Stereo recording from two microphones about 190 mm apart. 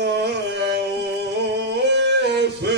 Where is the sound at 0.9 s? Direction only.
65° right (ahead or behind).